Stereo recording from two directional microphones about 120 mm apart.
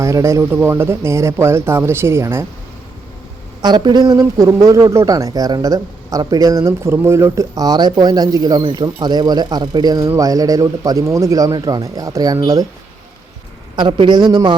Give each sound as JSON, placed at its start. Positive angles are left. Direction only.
{"t": 0.0, "sound": "a man's voice", "side_deg": -25}
{"t": 3.6, "sound": "a man's voice", "side_deg": -40}
{"t": 13.7, "sound": "speech", "side_deg": -45}